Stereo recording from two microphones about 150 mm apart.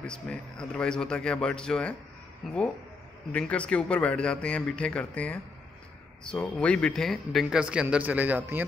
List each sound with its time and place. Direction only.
0.0 s a man's voice: 5° left (ahead or behind); by 8.6 s 15° right (ahead or behind)